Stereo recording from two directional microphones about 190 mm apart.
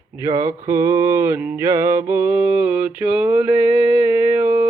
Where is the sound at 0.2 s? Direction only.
15° right (ahead or behind).